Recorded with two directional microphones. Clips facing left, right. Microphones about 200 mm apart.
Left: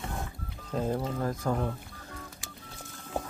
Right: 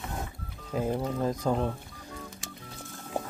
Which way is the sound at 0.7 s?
15° right (ahead or behind).